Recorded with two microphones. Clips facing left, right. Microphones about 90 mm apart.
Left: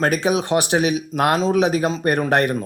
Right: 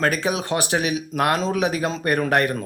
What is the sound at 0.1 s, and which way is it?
A man's voice, 20° left (ahead or behind).